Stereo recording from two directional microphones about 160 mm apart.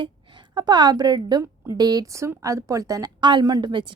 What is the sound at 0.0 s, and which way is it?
A woman's voice, 25° right (ahead or behind).